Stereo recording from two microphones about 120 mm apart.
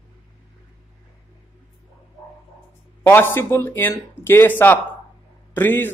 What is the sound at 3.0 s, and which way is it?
Speech, 15° left (ahead or behind).